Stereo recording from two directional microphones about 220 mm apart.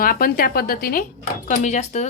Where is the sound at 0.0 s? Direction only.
40° left (ahead or behind).